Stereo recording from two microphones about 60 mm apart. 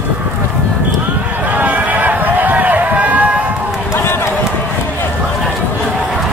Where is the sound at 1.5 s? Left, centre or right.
Right.